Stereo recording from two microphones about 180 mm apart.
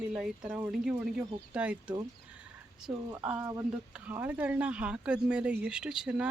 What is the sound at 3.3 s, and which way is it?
Speech, 10° right (ahead or behind).